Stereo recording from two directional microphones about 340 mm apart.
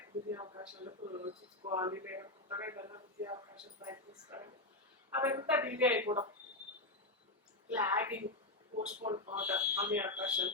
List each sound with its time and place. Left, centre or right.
0.3 s speech: centre
7.7 s speech: centre
8.7 s speech: right
9.3 s speech: centre